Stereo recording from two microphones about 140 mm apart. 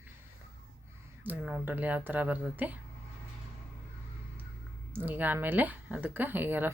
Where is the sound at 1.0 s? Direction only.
15° right (ahead or behind).